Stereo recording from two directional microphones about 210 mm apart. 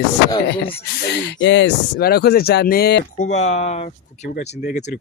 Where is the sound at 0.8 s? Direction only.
55° left (ahead or behind).